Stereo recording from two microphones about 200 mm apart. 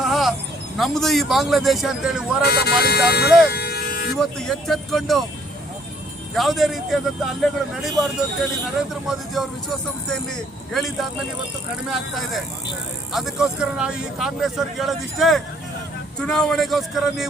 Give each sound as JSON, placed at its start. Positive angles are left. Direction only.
{"t": 0.0, "sound": "a sound", "side_deg": 0}
{"t": 0.8, "sound": "speech", "side_deg": 0}
{"t": 2.4, "sound": "speech", "side_deg": 55}
{"t": 3.5, "sound": "music", "side_deg": 55}
{"t": 4.1, "sound": "speech", "side_deg": 0}
{"t": 6.3, "sound": "speech", "side_deg": 0}
{"t": 9.0, "sound": "speech", "side_deg": 0}
{"t": 13.1, "sound": "speech", "side_deg": 0}